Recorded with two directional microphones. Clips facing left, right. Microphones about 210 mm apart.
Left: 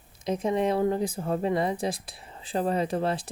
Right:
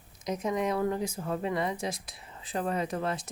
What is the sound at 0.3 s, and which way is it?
Speech, 30° left (ahead or behind).